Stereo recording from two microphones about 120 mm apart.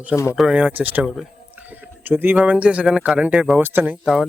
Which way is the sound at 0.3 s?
5° right (ahead or behind).